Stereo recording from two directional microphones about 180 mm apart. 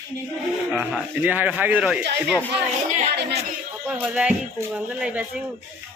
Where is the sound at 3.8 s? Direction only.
5° right (ahead or behind).